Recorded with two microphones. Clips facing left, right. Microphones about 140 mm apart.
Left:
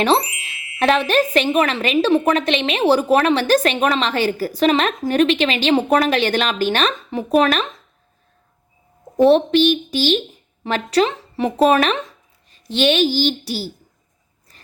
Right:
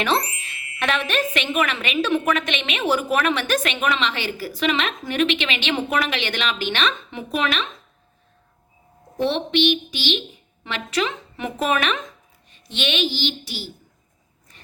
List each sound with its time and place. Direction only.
0.8 s a woman's voice: 35° left (ahead or behind)
9.1 s a child's voice: 40° left (ahead or behind)